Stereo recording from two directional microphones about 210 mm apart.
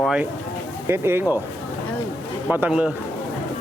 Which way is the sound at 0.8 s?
10° right (ahead or behind).